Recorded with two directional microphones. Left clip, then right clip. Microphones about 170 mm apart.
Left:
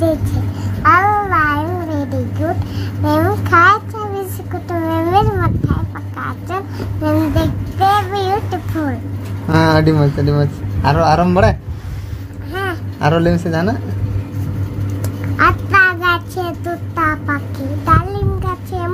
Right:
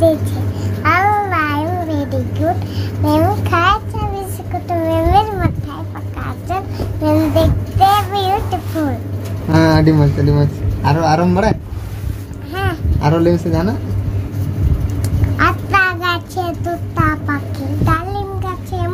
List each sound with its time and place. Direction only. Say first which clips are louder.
0.8 s babbling: left 2 dB; 5° left (ahead or behind)
3.0 s a sound: right 1 dB; 15° left (ahead or behind)
9.5 s speech: even; 30° left (ahead or behind)
13.0 s speech: even; 30° left (ahead or behind)
15.3 s child singing: left 2 dB; 5° left (ahead or behind)